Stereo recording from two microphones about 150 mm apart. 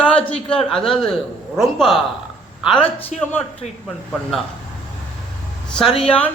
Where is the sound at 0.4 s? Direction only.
5° left (ahead or behind).